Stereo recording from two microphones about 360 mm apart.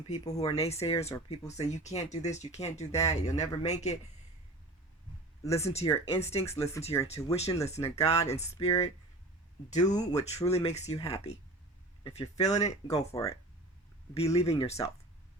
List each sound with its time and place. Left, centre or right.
0.1 s speech: centre
5.4 s speech: centre